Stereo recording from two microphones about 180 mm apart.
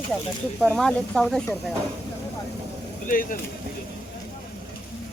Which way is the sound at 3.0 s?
50° left (ahead or behind).